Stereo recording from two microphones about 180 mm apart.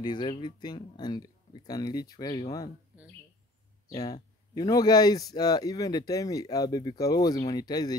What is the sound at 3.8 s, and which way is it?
A man's voice, 20° left (ahead or behind).